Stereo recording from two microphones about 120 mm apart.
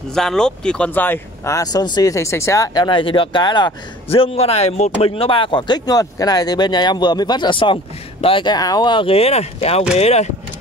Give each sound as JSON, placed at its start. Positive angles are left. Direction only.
{"t": 0.1, "sound": "speech", "side_deg": 5}
{"t": 5.1, "sound": "speech", "side_deg": 50}
{"t": 8.5, "sound": "speech", "side_deg": 30}